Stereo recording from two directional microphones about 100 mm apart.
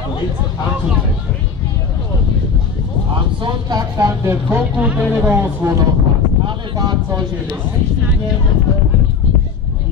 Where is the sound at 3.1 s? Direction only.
50° right (ahead or behind).